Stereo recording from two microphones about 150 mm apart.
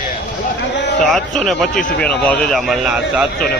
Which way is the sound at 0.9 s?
5° left (ahead or behind).